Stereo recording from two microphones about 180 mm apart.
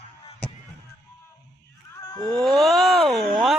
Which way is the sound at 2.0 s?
20° left (ahead or behind).